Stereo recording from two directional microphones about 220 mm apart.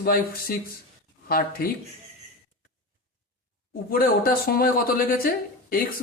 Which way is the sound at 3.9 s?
40° left (ahead or behind).